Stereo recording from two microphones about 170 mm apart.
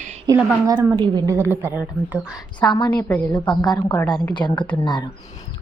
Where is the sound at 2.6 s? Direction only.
25° left (ahead or behind).